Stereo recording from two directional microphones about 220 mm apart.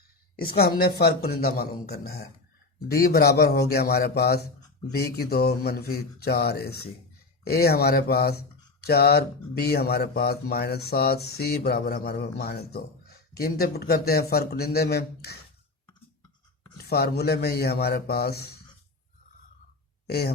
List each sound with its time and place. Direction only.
0.8 s speech: 45° left (ahead or behind)
16.7 s speech: 45° left (ahead or behind)
20.1 s speech: 45° left (ahead or behind)